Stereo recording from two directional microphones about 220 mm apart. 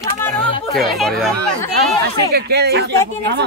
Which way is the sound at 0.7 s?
Centre (ahead or behind).